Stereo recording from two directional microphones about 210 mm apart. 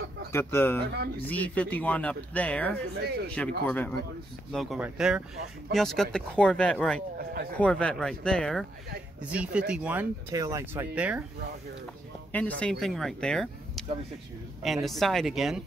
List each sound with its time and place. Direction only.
0.3 s speech: 10° left (ahead or behind)
3.0 s speech: 50° right (ahead or behind)
3.3 s speech: 5° left (ahead or behind)
12.3 s speech: 5° left (ahead or behind)